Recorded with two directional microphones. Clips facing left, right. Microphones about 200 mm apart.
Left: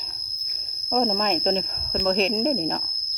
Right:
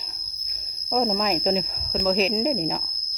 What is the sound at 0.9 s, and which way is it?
Speech, 5° right (ahead or behind).